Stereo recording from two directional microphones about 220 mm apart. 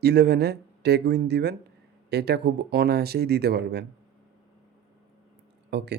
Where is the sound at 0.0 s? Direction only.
50° right (ahead or behind).